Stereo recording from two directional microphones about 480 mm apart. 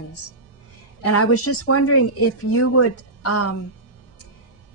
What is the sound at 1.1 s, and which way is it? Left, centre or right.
Speech, left.